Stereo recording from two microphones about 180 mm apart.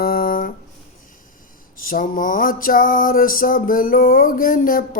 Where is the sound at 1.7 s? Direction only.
50° left (ahead or behind).